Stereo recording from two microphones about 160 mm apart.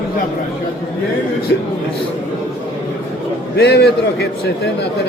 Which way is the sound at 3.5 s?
90° left.